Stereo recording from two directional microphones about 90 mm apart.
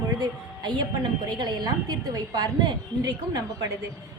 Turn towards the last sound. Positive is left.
turn(degrees=-45)  # may be behind; listen again after turning